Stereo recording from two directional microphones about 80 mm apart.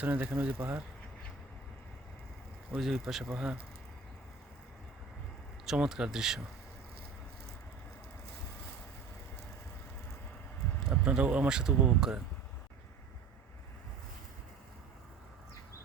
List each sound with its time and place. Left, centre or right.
0.0 s speech: right
2.7 s speech: centre
5.6 s speech: centre
10.8 s speech: centre